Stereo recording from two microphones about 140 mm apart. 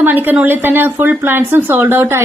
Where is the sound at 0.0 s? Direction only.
15° right (ahead or behind).